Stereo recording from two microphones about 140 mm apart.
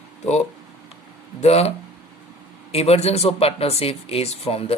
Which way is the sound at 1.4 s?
45° left (ahead or behind).